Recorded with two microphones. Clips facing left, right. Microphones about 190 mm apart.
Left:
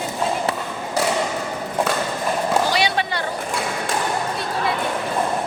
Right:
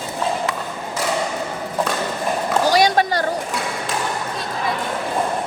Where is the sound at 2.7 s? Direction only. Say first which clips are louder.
Right 5 dB; 40° right (ahead or behind).